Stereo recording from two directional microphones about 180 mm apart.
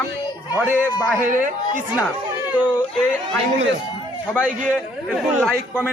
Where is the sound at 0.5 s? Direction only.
10° right (ahead or behind).